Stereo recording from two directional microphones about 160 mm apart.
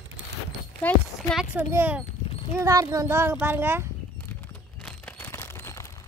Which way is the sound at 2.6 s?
20° right (ahead or behind).